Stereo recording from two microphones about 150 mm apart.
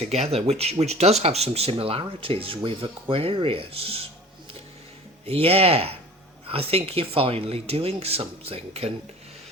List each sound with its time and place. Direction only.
0.0 s speech: 45° right (ahead or behind)
5.2 s speech: 40° right (ahead or behind)